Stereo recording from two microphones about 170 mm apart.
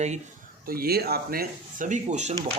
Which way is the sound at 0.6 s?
60° right (ahead or behind).